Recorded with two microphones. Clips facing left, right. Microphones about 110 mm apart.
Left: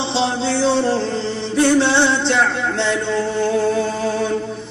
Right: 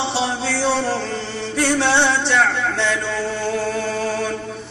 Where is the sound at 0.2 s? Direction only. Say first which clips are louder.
Left 7 dB; 25° left (ahead or behind).